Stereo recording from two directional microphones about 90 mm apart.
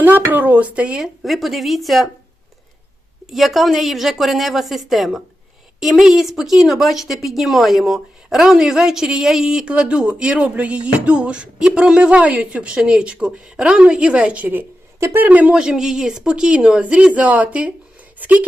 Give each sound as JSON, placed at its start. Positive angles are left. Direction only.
{"t": 0.0, "sound": "speech", "side_deg": -20}
{"t": 3.2, "sound": "a woman's voice", "side_deg": 0}